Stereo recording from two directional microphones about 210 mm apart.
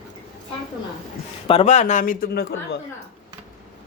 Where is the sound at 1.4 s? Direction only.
30° left (ahead or behind); by 2.8 s 50° left (ahead or behind).